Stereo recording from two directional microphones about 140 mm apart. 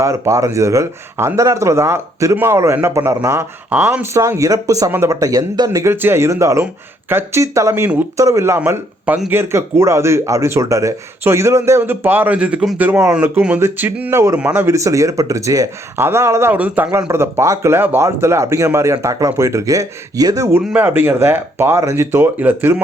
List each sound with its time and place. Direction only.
0.0 s speech: 20° right (ahead or behind)
20.7 s speech: 15° right (ahead or behind)